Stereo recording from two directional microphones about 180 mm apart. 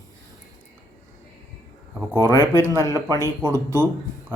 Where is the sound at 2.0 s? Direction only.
15° right (ahead or behind).